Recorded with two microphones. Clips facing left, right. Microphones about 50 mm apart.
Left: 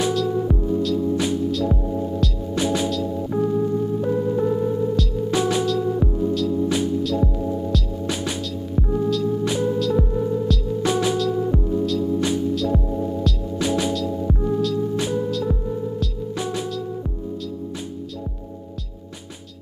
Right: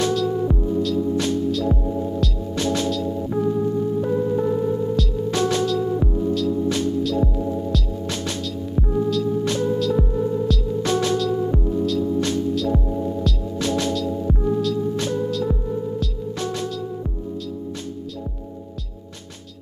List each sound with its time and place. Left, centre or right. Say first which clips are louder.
0.1 s music: even; centre
2.5 s music: left 1 dB; centre
2.9 s music: even; centre
5.4 s music: right 1 dB; centre
5.7 s music: even; centre
8.1 s music: left 3 dB; centre
8.7 s music: even; centre
10.9 s music: even; centre
11.1 s music: even; centre
13.6 s music: left 1 dB; centre
13.9 s music: even; centre
16.3 s music: left 1 dB; centre